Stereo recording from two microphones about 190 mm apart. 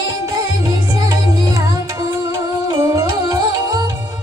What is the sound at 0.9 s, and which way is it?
Music, 20° right (ahead or behind).